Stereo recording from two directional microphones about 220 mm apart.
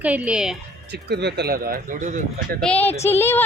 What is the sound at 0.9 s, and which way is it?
Speech, 50° right (ahead or behind).